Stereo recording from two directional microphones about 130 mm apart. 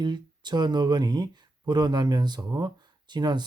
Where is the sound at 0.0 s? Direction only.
35° right (ahead or behind).